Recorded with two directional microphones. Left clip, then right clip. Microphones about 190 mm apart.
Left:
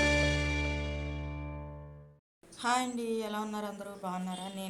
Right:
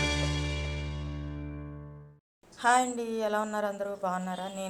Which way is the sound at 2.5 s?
20° right (ahead or behind).